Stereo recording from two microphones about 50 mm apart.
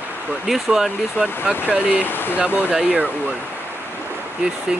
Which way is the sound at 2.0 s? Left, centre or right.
Left.